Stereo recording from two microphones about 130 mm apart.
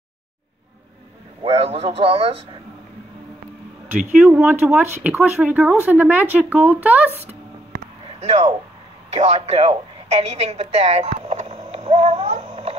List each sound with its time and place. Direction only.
1.5 s a man's voice: 50° right (ahead or behind)
4.4 s speech: 15° right (ahead or behind)
8.2 s a woman's voice: 60° right (ahead or behind)